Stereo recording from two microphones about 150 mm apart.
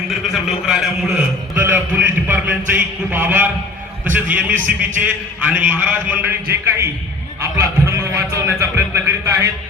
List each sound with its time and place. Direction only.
0.3 s a man's voice: centre (ahead or behind)
1.5 s a sound: 10° right (ahead or behind)
4.1 s a man's voice: 10° right (ahead or behind)